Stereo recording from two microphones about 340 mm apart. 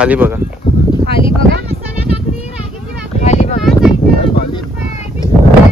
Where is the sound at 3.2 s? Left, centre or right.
Centre.